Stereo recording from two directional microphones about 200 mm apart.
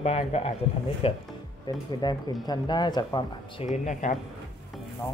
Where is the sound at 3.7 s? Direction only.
35° left (ahead or behind).